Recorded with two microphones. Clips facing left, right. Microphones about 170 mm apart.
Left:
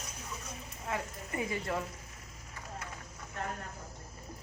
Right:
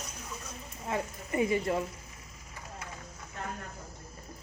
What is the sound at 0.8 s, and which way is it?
Speech, 25° right (ahead or behind).